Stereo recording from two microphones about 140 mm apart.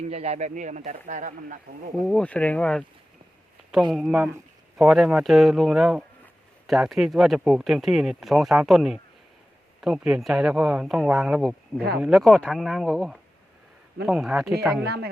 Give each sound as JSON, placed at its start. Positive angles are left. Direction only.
{"t": 0.0, "sound": "speech", "side_deg": -50}
{"t": 2.0, "sound": "speech", "side_deg": 10}
{"t": 3.9, "sound": "speech", "side_deg": -5}